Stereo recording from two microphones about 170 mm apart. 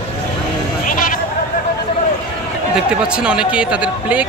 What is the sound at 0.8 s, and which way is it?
Sheep, 55° left (ahead or behind).